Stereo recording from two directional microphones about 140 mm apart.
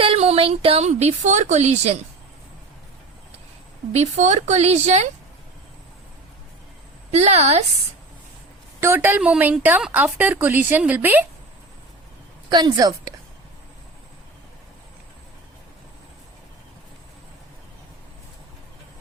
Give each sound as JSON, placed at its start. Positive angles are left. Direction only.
{"t": 0.0, "sound": "a woman's voice", "side_deg": -45}
{"t": 3.9, "sound": "a woman's voice", "side_deg": -55}
{"t": 7.1, "sound": "a woman's voice", "side_deg": -50}
{"t": 8.8, "sound": "a woman's voice", "side_deg": -15}
{"t": 12.5, "sound": "a woman's voice", "side_deg": -30}